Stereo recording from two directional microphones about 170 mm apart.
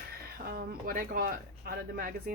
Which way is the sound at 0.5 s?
60° right (ahead or behind).